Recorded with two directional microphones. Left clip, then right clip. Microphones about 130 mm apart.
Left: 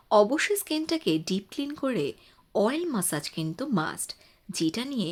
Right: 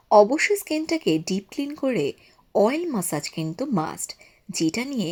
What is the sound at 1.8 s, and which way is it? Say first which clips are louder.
Speech: right 5 dB; centre (ahead or behind).